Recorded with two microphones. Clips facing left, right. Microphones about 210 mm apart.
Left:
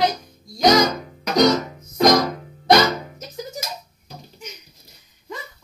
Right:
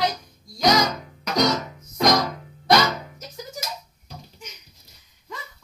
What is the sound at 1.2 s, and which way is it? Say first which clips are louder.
Music: left 5 dB; 40° left (ahead or behind).